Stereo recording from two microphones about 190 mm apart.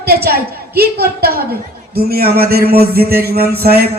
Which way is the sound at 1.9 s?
55° right (ahead or behind).